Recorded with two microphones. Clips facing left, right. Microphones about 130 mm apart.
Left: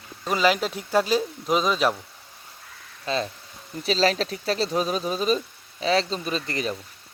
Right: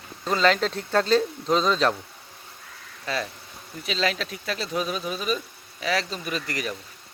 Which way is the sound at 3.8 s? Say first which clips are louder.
Left 5 dB; 35° left (ahead or behind).